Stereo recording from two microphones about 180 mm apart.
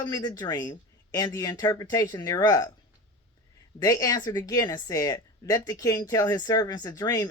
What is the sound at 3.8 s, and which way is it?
Speech, 20° left (ahead or behind).